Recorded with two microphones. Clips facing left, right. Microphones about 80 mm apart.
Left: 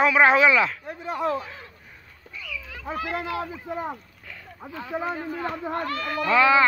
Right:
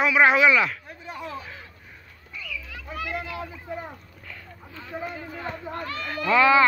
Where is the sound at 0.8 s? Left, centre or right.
Left.